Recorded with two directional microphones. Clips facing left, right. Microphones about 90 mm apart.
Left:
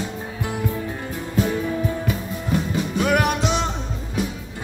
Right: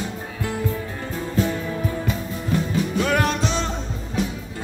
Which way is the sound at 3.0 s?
15° left (ahead or behind).